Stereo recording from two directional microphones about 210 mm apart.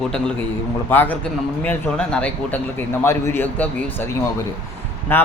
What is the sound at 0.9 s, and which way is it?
A man's voice, 10° left (ahead or behind).